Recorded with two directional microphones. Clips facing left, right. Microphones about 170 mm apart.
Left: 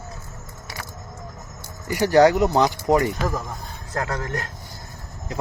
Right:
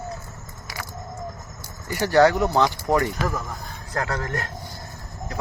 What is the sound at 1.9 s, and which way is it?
Speech, 15° left (ahead or behind).